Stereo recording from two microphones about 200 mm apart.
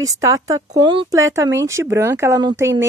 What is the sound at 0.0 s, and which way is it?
Speech, 15° right (ahead or behind).